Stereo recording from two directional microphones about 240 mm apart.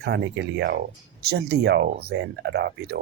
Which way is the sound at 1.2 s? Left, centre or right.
Right.